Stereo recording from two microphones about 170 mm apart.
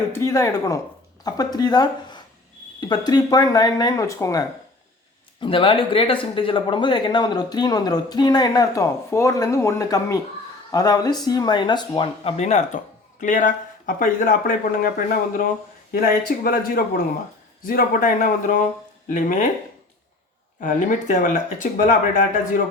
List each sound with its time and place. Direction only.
0.1 s speech: 20° left (ahead or behind)
5.4 s speech: 30° left (ahead or behind); by 19.5 s 50° left (ahead or behind)
20.6 s speech: 50° left (ahead or behind)